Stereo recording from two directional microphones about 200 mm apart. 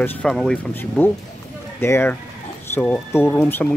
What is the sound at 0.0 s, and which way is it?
Speech, 5° left (ahead or behind).